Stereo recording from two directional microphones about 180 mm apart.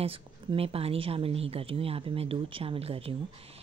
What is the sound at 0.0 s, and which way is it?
Speech, 30° right (ahead or behind).